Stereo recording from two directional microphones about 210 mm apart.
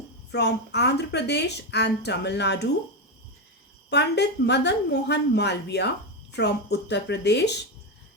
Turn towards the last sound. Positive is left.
turn(degrees=55)  # may be behind; listen again after turning